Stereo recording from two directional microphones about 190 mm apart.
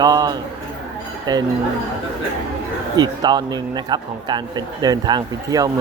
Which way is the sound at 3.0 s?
20° right (ahead or behind).